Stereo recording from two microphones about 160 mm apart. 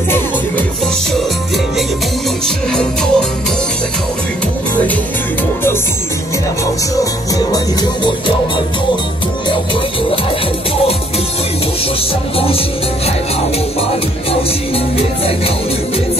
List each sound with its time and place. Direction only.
2.4 s music: 5° left (ahead or behind)
7.3 s music: 25° left (ahead or behind)
12.4 s music: 35° left (ahead or behind)
15.0 s music: 35° left (ahead or behind)